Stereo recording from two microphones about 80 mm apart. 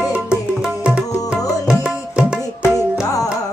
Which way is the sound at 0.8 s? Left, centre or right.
Centre.